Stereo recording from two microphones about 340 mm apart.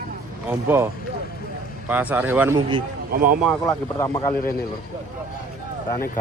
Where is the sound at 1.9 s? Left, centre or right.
Centre.